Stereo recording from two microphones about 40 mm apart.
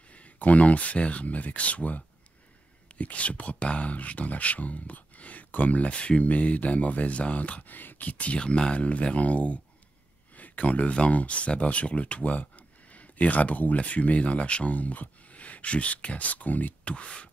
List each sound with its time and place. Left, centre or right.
0.1 s speech: left
7.7 s speech: left
8.4 s speech: left
16.8 s speech: left